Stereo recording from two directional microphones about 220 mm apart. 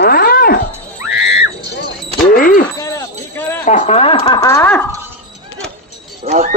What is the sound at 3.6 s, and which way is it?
Speech, 35° left (ahead or behind).